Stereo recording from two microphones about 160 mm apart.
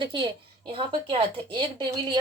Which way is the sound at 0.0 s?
30° right (ahead or behind).